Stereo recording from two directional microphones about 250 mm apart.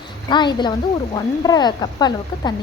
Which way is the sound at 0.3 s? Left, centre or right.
Centre.